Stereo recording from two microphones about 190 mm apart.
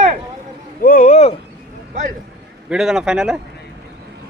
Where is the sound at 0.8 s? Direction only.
45° left (ahead or behind).